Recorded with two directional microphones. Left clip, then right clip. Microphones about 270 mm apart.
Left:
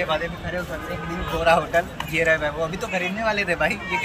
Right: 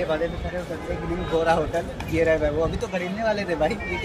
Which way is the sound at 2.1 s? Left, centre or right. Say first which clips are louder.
Even; centre.